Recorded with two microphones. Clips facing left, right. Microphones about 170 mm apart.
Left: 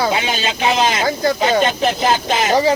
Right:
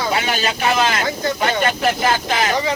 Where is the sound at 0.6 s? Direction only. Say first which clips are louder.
Left 3 dB; 20° left (ahead or behind).